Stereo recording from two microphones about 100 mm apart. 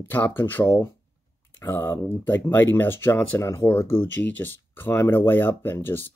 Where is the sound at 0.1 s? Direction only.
20° left (ahead or behind).